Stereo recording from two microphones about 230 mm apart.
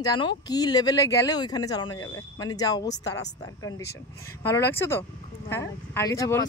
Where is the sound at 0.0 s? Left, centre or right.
Centre.